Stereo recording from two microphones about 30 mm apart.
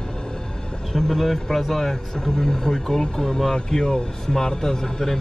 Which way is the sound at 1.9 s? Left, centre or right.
Centre.